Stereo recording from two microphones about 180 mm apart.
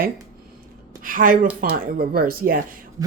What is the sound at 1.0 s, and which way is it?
A woman's voice, 50° right (ahead or behind).